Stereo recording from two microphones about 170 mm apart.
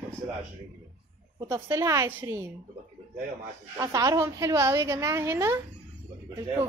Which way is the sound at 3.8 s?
20° right (ahead or behind).